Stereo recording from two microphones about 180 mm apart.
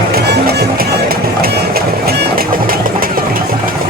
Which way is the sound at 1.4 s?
55° right (ahead or behind).